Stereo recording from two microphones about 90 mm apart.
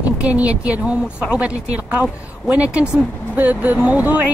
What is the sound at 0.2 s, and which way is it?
Speech, 15° right (ahead or behind).